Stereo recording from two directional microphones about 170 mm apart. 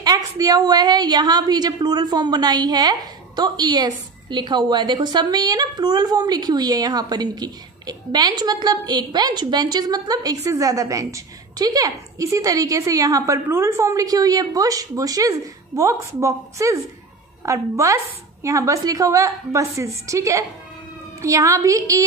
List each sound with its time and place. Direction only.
0.0 s a woman's voice: 20° right (ahead or behind)